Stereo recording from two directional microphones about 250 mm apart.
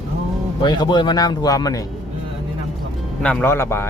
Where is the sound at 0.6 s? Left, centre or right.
Centre.